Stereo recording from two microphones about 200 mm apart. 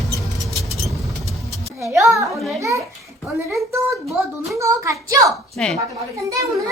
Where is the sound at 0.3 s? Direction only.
Centre (ahead or behind).